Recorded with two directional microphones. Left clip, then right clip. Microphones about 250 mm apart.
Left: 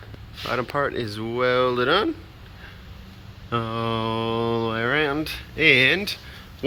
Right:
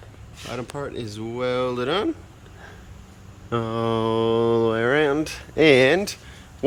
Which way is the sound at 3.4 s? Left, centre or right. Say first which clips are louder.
Right 1 dB; centre.